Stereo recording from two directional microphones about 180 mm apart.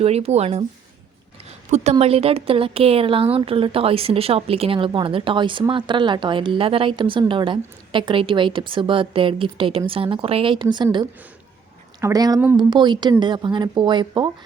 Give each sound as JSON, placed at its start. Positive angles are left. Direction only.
{"t": 0.0, "sound": "speech", "side_deg": -35}
{"t": 1.7, "sound": "a woman's voice", "side_deg": -40}
{"t": 11.9, "sound": "a woman's voice", "side_deg": -20}